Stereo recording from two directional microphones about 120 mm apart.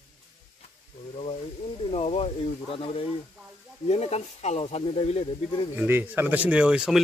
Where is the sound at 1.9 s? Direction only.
60° left (ahead or behind).